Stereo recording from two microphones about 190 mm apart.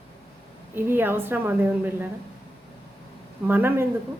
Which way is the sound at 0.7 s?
10° right (ahead or behind).